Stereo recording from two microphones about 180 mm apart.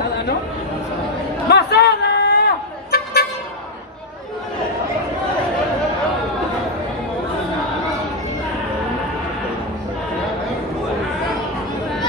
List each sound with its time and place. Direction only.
1.5 s vehicle: 65° left (ahead or behind)